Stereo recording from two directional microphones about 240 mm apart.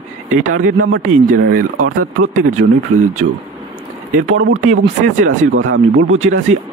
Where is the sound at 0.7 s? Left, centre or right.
Right.